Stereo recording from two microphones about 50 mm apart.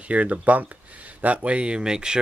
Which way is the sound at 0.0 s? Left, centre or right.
Right.